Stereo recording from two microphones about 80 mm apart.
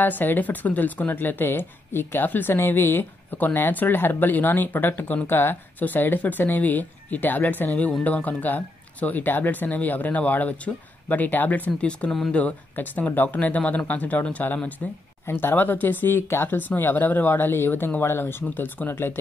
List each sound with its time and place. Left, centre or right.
0.0 s a woman's voice: left